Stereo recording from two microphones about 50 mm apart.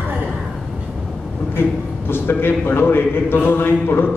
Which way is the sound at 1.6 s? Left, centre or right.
Left.